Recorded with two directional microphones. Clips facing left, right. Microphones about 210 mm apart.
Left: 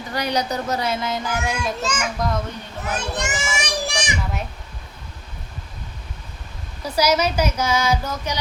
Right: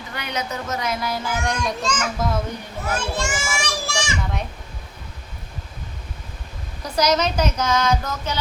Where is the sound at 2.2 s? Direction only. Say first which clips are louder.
Even; 5° right (ahead or behind).